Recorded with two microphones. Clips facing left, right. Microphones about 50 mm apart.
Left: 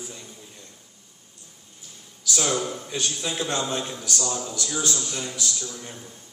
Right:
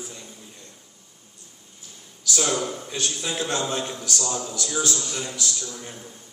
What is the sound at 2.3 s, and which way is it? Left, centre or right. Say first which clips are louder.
A man's voice: right 1 dB; centre.